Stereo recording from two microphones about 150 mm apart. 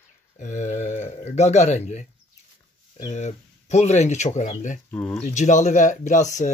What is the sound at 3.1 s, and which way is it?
Speech, 50° left (ahead or behind).